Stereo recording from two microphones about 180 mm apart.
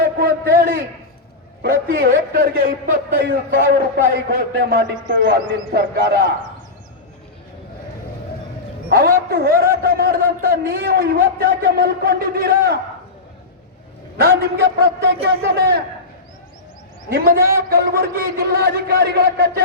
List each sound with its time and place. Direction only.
0.2 s a sound: 55° right (ahead or behind)
1.6 s a man's voice: 55° right (ahead or behind)
3.2 s a man's voice: 85° right; by 6.3 s 65° right (ahead or behind)
8.9 s a man's voice: 60° right (ahead or behind)
14.2 s a man's voice: 60° right (ahead or behind)
17.1 s a man's voice: 60° right (ahead or behind)